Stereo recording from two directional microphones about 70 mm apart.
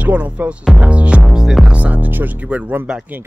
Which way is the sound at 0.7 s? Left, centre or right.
Centre.